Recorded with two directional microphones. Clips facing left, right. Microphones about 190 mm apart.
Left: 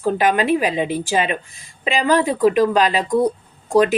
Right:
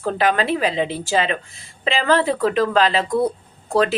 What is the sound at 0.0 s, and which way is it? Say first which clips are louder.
A woman's voice: left 2 dB; 15° left (ahead or behind).